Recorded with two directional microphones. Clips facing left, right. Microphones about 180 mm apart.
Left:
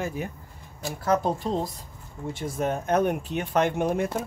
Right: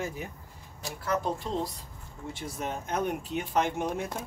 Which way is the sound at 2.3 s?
50° left (ahead or behind).